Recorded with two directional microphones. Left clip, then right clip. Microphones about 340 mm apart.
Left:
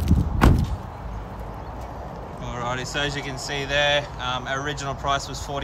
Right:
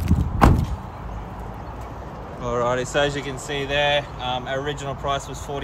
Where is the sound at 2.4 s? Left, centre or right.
Centre.